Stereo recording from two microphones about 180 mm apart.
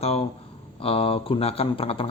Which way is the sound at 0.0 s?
35° left (ahead or behind).